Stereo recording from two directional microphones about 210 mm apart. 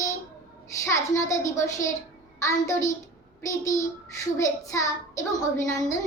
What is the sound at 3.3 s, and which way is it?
A child's voice, 15° left (ahead or behind).